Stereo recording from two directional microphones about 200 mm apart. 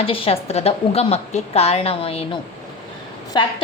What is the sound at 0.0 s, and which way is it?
A woman's voice, 30° left (ahead or behind).